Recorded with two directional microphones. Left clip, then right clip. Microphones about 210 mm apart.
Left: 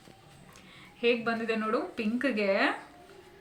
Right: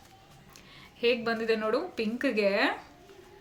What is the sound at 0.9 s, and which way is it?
A woman's voice, 50° right (ahead or behind).